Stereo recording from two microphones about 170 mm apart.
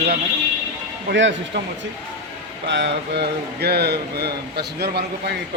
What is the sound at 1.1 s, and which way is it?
Speech, 90° right.